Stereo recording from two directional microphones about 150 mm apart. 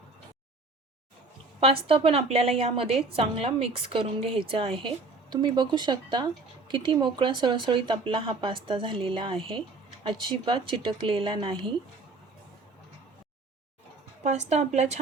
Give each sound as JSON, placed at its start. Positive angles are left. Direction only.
{"t": 1.6, "sound": "a woman's voice", "side_deg": -40}
{"t": 14.3, "sound": "a woman's voice", "side_deg": -50}